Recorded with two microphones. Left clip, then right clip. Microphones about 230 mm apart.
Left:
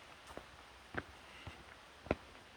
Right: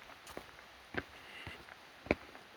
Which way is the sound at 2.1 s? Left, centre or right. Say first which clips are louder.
Right 4 dB; right.